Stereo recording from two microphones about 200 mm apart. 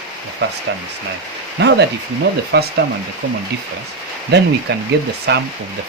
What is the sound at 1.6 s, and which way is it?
Speech, 60° right (ahead or behind).